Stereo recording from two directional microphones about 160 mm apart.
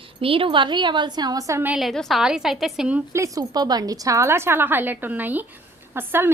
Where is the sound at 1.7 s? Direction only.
Centre (ahead or behind).